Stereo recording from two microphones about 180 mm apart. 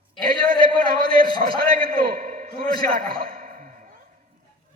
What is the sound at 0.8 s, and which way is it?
A man's voice, 55° right (ahead or behind).